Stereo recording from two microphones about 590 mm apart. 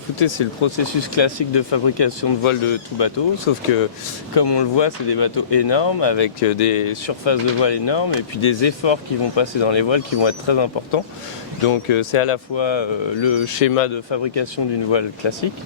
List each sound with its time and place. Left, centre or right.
0.2 s speech: left
14.1 s speech: left